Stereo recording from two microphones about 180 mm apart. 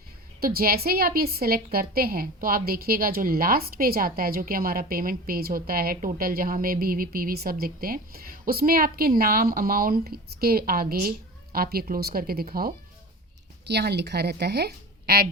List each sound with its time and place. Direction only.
0.3 s a woman's voice: 55° right (ahead or behind)
13.7 s a woman's voice: 65° right (ahead or behind)